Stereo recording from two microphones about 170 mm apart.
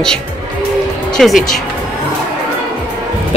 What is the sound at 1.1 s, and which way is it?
Speech, centre (ahead or behind).